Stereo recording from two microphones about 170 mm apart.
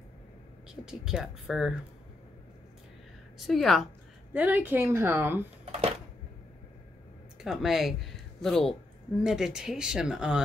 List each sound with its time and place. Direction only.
0.8 s speech: 5° right (ahead or behind)
3.3 s speech: centre (ahead or behind)
4.3 s a woman's voice: 10° right (ahead or behind)
7.4 s speech: centre (ahead or behind)